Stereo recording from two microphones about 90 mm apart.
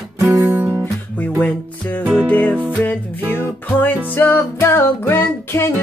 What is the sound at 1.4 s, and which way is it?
Music, 15° left (ahead or behind).